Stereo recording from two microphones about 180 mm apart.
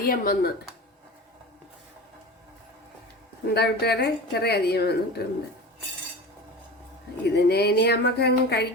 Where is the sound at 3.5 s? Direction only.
65° left (ahead or behind).